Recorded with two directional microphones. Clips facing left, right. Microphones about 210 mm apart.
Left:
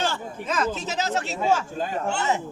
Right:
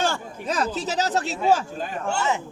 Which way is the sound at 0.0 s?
40° right (ahead or behind).